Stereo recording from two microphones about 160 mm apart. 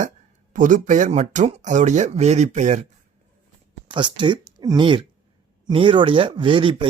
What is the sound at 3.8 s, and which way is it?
Speech, 30° right (ahead or behind).